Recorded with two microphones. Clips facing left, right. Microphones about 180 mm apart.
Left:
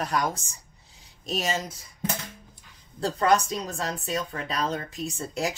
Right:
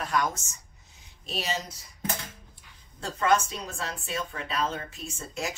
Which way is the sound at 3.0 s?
35° left (ahead or behind).